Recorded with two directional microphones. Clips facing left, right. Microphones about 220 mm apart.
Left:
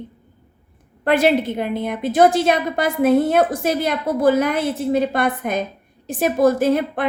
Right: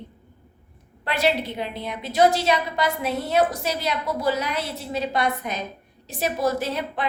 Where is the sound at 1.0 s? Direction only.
50° left (ahead or behind).